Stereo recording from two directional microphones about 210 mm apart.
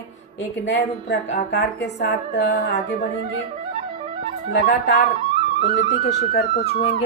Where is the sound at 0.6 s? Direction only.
55° left (ahead or behind).